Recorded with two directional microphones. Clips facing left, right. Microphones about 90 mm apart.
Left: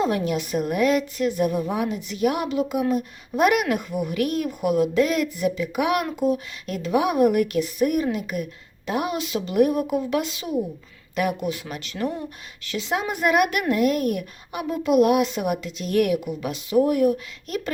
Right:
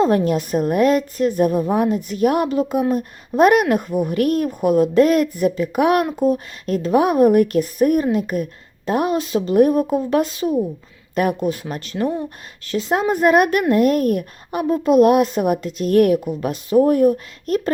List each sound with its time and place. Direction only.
0.0 s a woman's voice: 40° right (ahead or behind)